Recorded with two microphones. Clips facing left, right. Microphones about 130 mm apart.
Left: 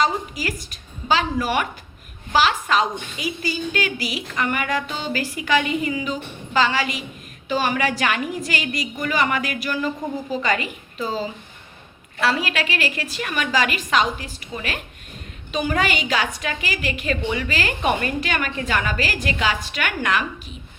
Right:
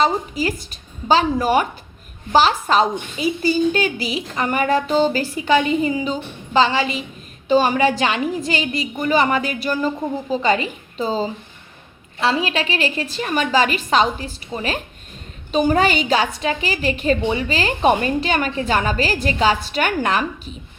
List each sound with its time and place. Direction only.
0.0 s a woman's voice: 30° right (ahead or behind)